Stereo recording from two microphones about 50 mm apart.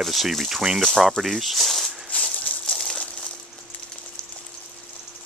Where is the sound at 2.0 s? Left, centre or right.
Left.